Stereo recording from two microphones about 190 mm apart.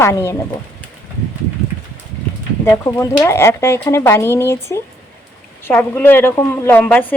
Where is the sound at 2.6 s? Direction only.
15° left (ahead or behind).